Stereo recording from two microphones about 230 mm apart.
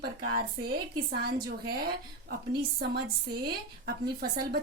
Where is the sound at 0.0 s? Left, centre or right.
Right.